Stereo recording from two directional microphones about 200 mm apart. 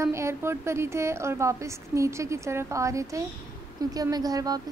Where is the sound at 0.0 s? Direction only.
15° right (ahead or behind).